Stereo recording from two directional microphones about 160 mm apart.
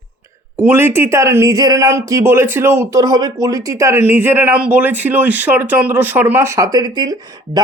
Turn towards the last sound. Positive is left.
turn(degrees=-25)  # may be behind; listen again after turning